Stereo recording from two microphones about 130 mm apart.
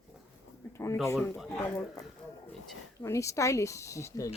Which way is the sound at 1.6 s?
20° left (ahead or behind).